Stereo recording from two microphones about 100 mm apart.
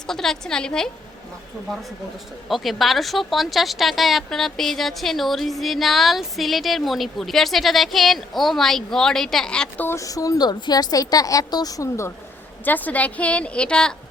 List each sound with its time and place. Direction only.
0.1 s speech: 5° left (ahead or behind)
2.5 s speech: centre (ahead or behind)
9.8 s a woman's voice: 30° left (ahead or behind)
12.6 s a woman's voice: 15° left (ahead or behind)